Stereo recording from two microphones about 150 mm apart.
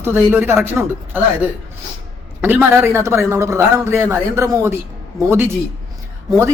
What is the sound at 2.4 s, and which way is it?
Speech, 15° right (ahead or behind).